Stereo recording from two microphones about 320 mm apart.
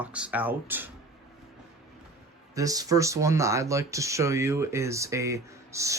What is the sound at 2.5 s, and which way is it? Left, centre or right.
Speech, centre.